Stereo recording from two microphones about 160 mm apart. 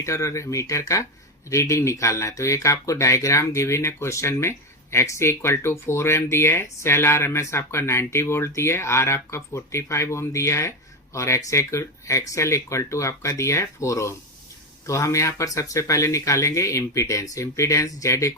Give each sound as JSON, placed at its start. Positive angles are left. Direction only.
{"t": 0.0, "sound": "speech", "side_deg": 20}